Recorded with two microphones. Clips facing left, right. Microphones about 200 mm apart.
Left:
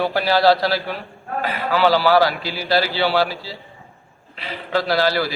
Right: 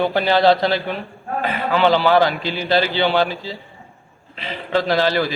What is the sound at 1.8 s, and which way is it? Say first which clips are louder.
A man's voice: even; 5° left (ahead or behind).